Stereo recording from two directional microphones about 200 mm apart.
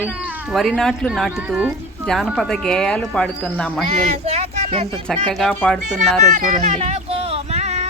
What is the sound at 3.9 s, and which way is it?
Speech, 30° right (ahead or behind).